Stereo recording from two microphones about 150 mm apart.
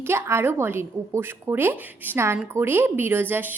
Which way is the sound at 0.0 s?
15° right (ahead or behind).